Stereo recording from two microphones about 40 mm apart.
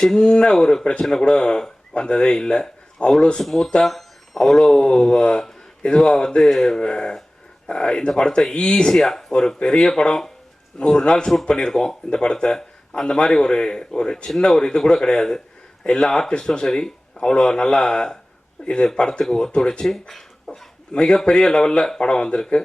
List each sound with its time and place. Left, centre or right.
0.2 s speech: left
3.4 s speech: centre
4.8 s speech: centre
8.9 s speech: centre
10.8 s speech: left
19.9 s speech: centre
20.5 s speech: centre